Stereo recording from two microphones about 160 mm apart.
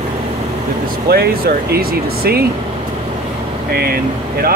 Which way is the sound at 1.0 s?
80° right.